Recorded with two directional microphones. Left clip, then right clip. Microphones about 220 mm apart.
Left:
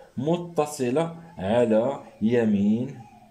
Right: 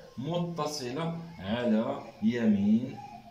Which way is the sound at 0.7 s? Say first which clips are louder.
Left 10 dB; 50° left (ahead or behind).